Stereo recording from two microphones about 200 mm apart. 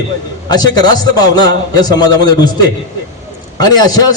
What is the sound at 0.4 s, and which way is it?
A man's voice, 20° left (ahead or behind).